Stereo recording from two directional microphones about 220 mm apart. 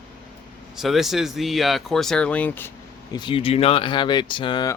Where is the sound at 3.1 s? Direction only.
20° left (ahead or behind).